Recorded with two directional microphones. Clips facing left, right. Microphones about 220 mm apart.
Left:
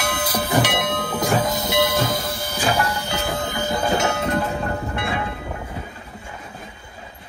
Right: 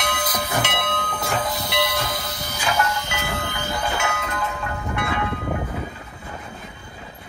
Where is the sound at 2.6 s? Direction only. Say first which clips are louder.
Left 1 dB; 35° left (ahead or behind).